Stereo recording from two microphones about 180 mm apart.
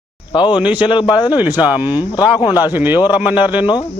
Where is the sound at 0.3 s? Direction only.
25° left (ahead or behind).